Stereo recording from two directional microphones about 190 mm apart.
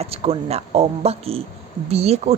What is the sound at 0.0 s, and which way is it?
Speech, 30° right (ahead or behind).